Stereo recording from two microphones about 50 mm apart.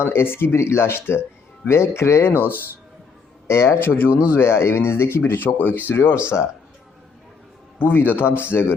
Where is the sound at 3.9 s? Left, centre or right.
Left.